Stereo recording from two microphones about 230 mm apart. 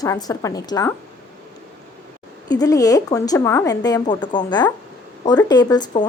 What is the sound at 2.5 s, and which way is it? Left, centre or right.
A woman's voice, centre.